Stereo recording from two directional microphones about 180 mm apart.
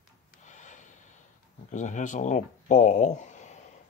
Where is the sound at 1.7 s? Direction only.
40° left (ahead or behind).